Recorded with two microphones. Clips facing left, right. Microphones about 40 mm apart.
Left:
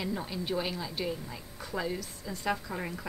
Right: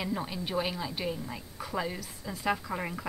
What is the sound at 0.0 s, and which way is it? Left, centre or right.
A woman's voice, centre.